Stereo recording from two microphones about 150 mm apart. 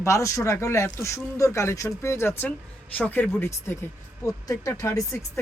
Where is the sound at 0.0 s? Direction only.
20° left (ahead or behind).